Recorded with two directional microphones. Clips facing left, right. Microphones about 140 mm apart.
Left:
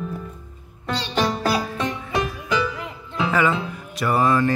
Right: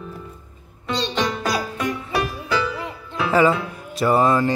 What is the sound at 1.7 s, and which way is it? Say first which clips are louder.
Music: right 1 dB; 25° left (ahead or behind).